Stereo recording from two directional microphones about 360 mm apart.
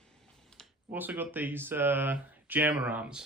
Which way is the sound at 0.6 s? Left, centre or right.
Centre.